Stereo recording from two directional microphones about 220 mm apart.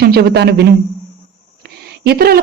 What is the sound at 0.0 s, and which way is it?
Speech, 45° right (ahead or behind).